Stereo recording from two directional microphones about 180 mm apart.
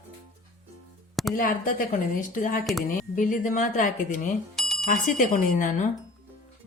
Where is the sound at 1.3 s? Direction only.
50° left (ahead or behind).